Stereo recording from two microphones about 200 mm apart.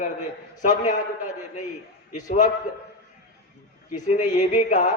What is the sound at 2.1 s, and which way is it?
Speech, 35° left (ahead or behind).